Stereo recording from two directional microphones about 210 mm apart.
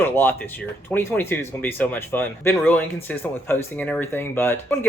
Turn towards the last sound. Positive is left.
turn(degrees=10)  # may be behind; listen again after turning